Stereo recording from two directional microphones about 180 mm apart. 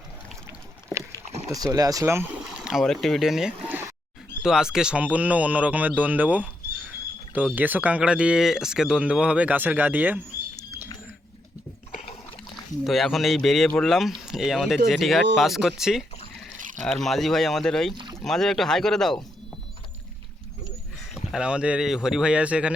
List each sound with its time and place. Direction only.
1.5 s speech: 20° right (ahead or behind)
12.8 s speech: centre (ahead or behind)
17.9 s boat: 25° right (ahead or behind)
18.2 s speech: centre (ahead or behind)
21.3 s speech: 5° right (ahead or behind)